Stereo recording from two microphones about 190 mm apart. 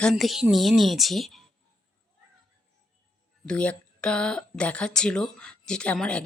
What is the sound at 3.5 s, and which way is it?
Speech, 5° left (ahead or behind).